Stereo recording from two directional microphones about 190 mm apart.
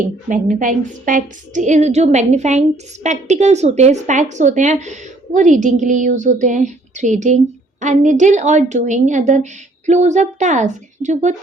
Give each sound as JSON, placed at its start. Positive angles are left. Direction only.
{"t": 0.0, "sound": "a woman's voice", "side_deg": -45}